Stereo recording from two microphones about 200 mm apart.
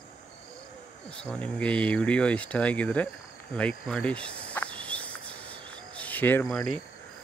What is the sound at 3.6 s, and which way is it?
Cricket, 5° left (ahead or behind).